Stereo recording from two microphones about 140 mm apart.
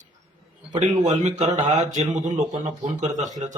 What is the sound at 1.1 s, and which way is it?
A man's voice, 55° right (ahead or behind).